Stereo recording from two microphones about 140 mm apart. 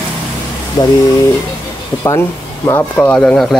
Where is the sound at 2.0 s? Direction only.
20° left (ahead or behind).